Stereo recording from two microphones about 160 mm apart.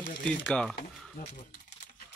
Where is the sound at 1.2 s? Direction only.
65° left (ahead or behind).